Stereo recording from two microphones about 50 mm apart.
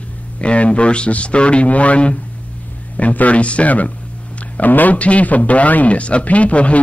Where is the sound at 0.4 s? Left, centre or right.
Left.